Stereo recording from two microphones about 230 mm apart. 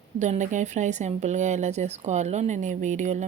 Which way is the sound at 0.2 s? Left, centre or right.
Right.